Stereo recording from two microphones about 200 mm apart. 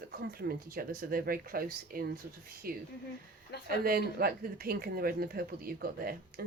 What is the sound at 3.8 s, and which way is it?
Speech, 50° right (ahead or behind).